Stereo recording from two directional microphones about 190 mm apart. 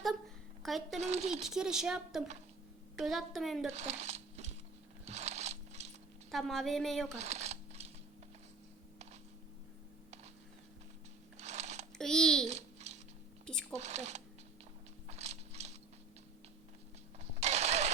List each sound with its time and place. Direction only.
0.6 s speech: centre (ahead or behind)
0.9 s speech: 35° right (ahead or behind)
1.5 s speech: 5° right (ahead or behind)
3.7 s a sound: 35° right (ahead or behind)
6.3 s speech: centre (ahead or behind)
7.1 s a sound: 35° right (ahead or behind)
11.3 s a sound: 35° right (ahead or behind)
11.9 s a child's voice: 5° left (ahead or behind)
12.5 s babbling: 35° right (ahead or behind)
13.4 s squish: 5° left (ahead or behind)
13.7 s speech: 35° right (ahead or behind)
15.0 s mechanisms: 35° right (ahead or behind)
17.4 s engine starting: 35° right (ahead or behind)